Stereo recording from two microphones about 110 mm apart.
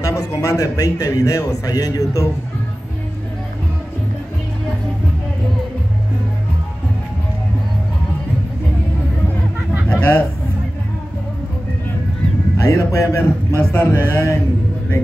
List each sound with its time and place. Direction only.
0.0 s a man's voice: 30° left (ahead or behind)
9.8 s a sound: 15° left (ahead or behind)
12.5 s speech: 25° left (ahead or behind)